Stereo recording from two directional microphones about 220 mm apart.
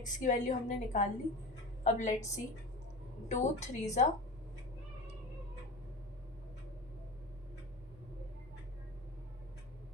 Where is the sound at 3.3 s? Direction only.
30° left (ahead or behind).